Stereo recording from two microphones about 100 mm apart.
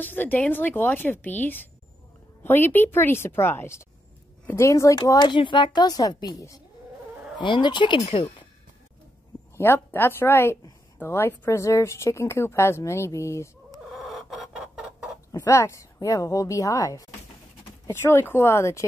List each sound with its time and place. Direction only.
0.0 s speech: 20° left (ahead or behind); by 5.3 s 40° left (ahead or behind)
5.3 s a woman's voice: 55° left (ahead or behind); by 6.6 s 35° left (ahead or behind)
7.3 s a woman's voice: 50° left (ahead or behind); by 8.5 s 70° left (ahead or behind)
9.6 s speech: 20° left (ahead or behind)
13.9 s chicken: centre (ahead or behind)
15.3 s speech: 30° left (ahead or behind)
17.8 s speech: 25° left (ahead or behind)